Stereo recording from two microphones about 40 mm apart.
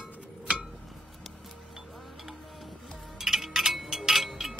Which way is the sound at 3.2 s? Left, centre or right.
Centre.